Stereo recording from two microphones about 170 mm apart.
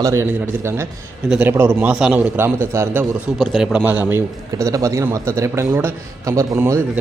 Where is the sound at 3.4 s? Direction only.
Centre (ahead or behind).